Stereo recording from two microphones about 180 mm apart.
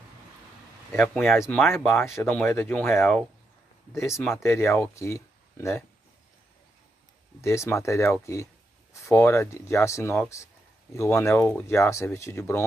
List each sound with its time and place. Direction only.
0.9 s speech: 10° left (ahead or behind)
7.4 s speech: 15° left (ahead or behind)